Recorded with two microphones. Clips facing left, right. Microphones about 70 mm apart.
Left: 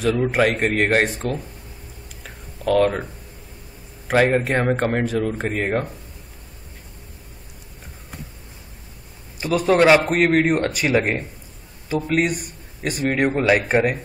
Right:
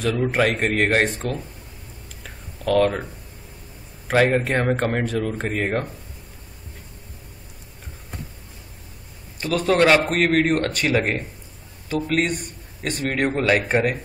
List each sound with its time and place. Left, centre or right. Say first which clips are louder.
0.0 s speech: left 2 dB; centre
2.2 s a sound: left 2 dB; centre
4.1 s speech: left 1 dB; centre
9.4 s a man's voice: left 2 dB; centre
11.9 s a man's voice: left 1 dB; centre